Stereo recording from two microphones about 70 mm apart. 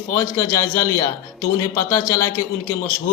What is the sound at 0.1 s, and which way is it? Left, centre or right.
A man's voice, left.